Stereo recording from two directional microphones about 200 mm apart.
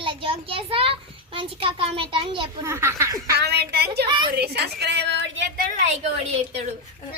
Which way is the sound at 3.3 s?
55° right (ahead or behind).